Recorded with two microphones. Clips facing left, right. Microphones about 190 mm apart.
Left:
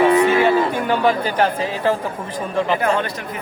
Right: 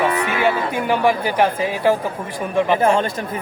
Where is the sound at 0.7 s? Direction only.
10° right (ahead or behind).